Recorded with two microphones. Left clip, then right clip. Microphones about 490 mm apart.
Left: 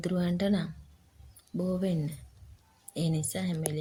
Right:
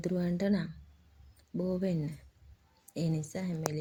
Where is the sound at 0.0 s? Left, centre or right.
Left.